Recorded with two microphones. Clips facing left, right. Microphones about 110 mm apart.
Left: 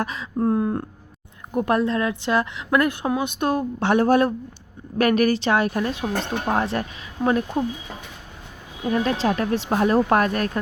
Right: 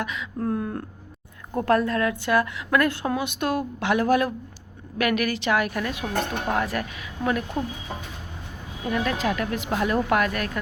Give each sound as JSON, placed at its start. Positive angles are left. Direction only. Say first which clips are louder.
{"t": 0.0, "sound": "a woman's voice", "louder": "left 5 dB", "side_deg": 35}
{"t": 8.9, "sound": "speech", "louder": "left 4 dB", "side_deg": 30}